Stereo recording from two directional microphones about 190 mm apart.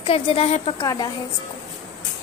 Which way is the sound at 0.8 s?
20° left (ahead or behind).